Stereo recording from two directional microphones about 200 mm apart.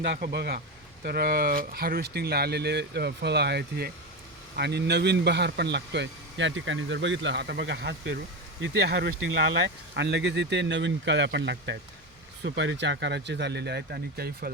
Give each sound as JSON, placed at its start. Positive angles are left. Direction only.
{"t": 0.0, "sound": "speech", "side_deg": -55}